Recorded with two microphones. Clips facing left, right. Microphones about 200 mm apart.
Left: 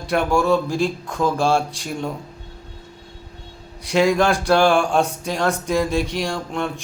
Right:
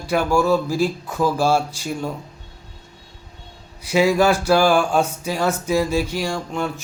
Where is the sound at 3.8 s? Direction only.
5° right (ahead or behind).